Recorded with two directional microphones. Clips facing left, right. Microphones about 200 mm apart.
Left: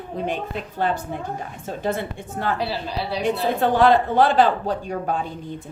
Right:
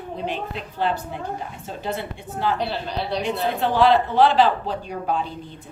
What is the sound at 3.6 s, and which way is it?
A woman's voice, 50° left (ahead or behind).